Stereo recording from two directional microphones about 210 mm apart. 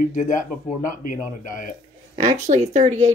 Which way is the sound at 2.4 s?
35° right (ahead or behind).